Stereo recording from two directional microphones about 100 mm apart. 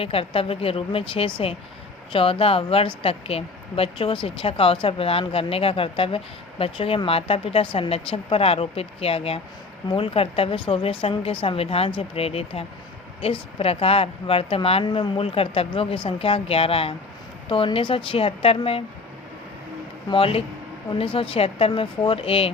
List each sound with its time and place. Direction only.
0.0 s speech: 70° left (ahead or behind)
14.8 s speech: 60° left (ahead or behind)
17.7 s speech: 60° left (ahead or behind)
20.1 s speech: 70° left (ahead or behind)